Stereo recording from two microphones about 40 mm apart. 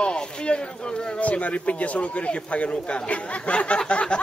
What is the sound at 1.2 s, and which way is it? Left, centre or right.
Speech, left.